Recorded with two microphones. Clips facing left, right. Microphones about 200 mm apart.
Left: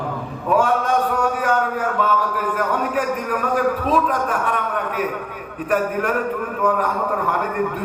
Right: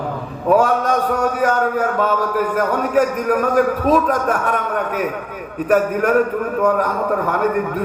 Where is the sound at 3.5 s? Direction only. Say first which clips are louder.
Right 2 dB; 45° right (ahead or behind).